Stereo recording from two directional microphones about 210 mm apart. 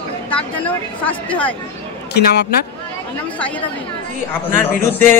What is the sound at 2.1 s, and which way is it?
Speech, 50° left (ahead or behind).